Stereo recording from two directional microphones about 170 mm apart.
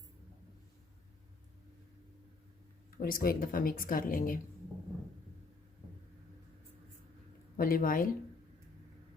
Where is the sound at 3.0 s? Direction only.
60° left (ahead or behind).